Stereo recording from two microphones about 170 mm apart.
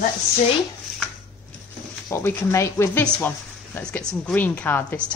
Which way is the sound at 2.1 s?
15° left (ahead or behind).